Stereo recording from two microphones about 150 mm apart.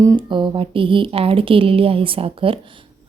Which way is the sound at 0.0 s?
25° right (ahead or behind).